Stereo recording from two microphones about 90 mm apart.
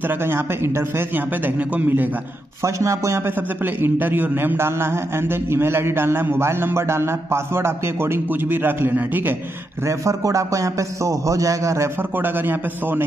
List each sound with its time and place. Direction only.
0.1 s a man's voice: 25° right (ahead or behind)
2.6 s a man's voice: 35° right (ahead or behind)
3.3 s a man's voice: 20° right (ahead or behind)
9.8 s a man's voice: 35° right (ahead or behind)